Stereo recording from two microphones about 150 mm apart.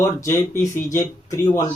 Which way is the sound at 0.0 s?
20° left (ahead or behind).